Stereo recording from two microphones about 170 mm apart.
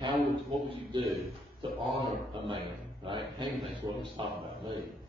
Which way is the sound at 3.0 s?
30° right (ahead or behind).